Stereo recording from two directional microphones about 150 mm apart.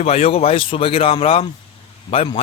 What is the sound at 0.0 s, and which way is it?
Speech, 45° left (ahead or behind).